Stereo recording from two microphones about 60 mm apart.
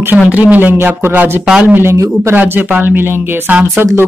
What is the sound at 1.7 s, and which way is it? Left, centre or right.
Speech, right.